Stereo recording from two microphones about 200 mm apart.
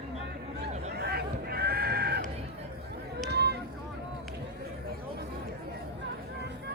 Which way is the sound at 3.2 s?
55° right (ahead or behind).